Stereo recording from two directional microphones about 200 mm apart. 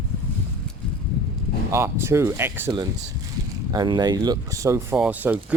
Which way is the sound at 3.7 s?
20° right (ahead or behind).